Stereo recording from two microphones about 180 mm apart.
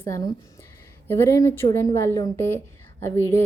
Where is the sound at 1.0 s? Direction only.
15° left (ahead or behind).